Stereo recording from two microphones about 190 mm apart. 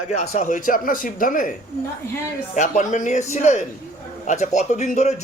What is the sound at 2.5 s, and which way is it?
A man's voice, 40° left (ahead or behind).